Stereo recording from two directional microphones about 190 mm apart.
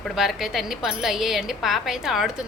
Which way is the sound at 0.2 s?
Centre (ahead or behind).